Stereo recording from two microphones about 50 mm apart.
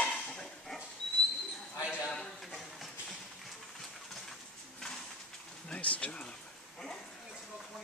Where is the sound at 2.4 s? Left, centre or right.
Centre.